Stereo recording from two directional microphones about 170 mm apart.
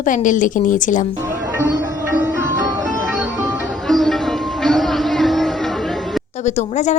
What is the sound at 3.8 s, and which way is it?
Sitar, centre (ahead or behind).